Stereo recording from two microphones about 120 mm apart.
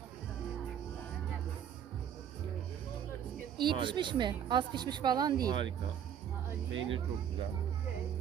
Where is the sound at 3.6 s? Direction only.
40° right (ahead or behind).